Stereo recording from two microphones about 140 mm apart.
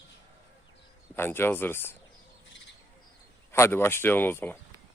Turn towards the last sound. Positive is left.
turn(degrees=15)  # may be behind; listen again after turning